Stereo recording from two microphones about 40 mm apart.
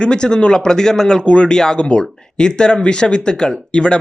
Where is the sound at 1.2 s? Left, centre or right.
Left.